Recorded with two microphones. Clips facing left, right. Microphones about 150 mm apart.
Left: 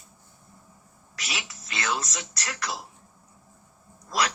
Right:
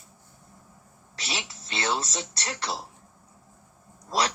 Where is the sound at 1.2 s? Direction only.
30° right (ahead or behind).